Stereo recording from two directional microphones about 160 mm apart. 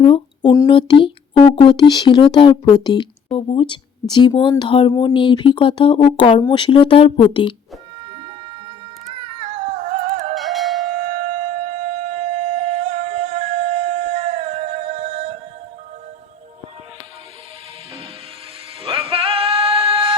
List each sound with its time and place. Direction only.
0.0 s speech: 35° left (ahead or behind)
9.8 s music: 45° right (ahead or behind)
10.3 s music: centre (ahead or behind)
11.3 s music: 45° right (ahead or behind)
18.8 s music: 35° right (ahead or behind)